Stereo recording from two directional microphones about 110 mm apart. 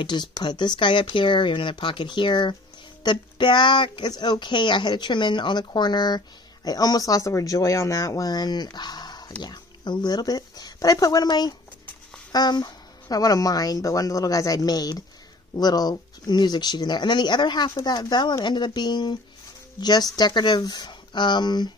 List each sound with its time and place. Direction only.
0.0 s speech: 40° left (ahead or behind)